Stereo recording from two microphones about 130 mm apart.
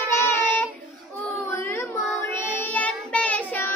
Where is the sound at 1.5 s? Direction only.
20° left (ahead or behind).